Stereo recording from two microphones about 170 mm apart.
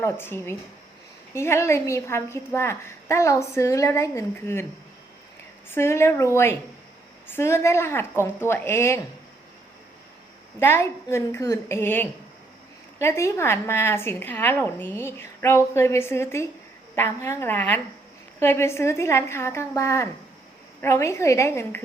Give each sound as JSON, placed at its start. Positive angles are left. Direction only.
{"t": 0.0, "sound": "a woman's voice", "side_deg": 15}
{"t": 5.7, "sound": "a woman's voice", "side_deg": 15}
{"t": 10.6, "sound": "a woman's voice", "side_deg": 15}